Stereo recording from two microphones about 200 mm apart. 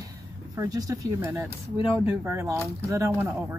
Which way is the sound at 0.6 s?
15° right (ahead or behind).